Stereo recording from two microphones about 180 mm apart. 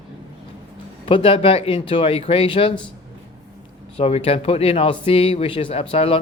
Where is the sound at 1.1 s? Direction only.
30° left (ahead or behind).